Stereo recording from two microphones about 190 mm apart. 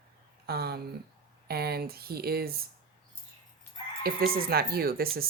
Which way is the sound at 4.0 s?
50° right (ahead or behind).